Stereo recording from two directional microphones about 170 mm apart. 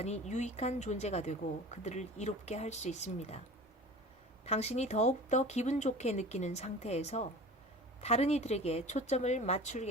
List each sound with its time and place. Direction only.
0.0 s speech: 40° left (ahead or behind)
4.4 s speech: 40° left (ahead or behind)